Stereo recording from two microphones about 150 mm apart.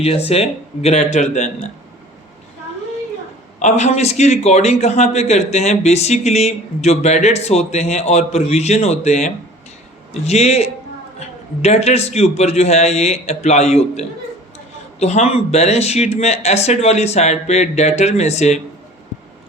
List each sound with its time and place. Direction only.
0.0 s a man's voice: 40° left (ahead or behind)
3.6 s a man's voice: 50° left (ahead or behind)